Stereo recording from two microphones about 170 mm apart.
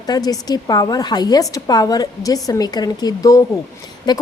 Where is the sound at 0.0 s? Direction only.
20° left (ahead or behind).